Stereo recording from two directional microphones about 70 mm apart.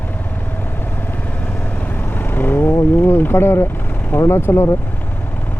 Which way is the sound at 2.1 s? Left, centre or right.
Left.